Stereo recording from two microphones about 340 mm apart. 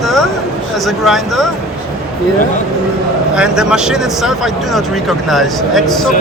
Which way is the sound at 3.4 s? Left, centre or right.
Centre.